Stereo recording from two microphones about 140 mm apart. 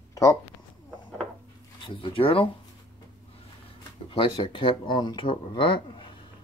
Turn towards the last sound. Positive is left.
turn(degrees=35)  # may be behind; listen again after turning